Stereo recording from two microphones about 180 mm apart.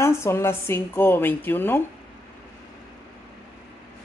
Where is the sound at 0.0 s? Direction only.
15° left (ahead or behind).